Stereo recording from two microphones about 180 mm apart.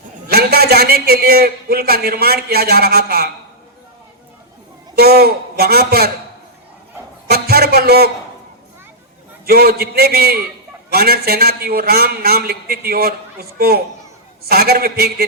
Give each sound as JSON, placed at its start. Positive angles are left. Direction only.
{"t": 0.3, "sound": "a man's voice", "side_deg": -60}
{"t": 4.9, "sound": "a man's voice", "side_deg": -60}
{"t": 7.3, "sound": "a man's voice", "side_deg": -60}
{"t": 9.5, "sound": "a man's voice", "side_deg": -55}